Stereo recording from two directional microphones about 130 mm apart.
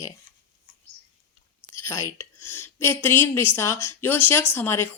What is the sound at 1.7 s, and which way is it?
A woman's voice, 25° left (ahead or behind).